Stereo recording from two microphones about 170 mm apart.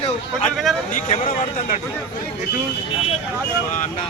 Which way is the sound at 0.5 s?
Centre (ahead or behind).